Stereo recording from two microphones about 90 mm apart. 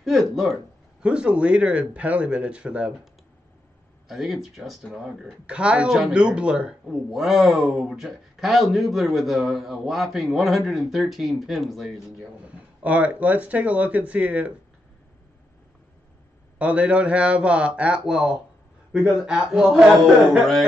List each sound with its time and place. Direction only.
0.0 s speech: centre (ahead or behind)
1.0 s speech: 10° right (ahead or behind)
4.1 s speech: 5° right (ahead or behind)
12.4 s speech: 15° right (ahead or behind)
16.5 s speech: 15° right (ahead or behind)